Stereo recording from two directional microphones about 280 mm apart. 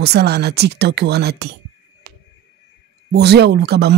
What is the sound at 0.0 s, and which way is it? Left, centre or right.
Speech, right.